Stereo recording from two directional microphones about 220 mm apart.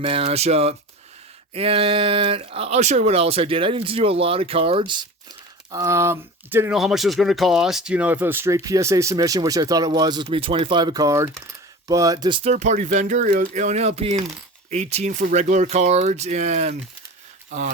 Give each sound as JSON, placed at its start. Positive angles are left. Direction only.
{"t": 0.0, "sound": "speech", "side_deg": -25}
{"t": 5.7, "sound": "speech", "side_deg": -15}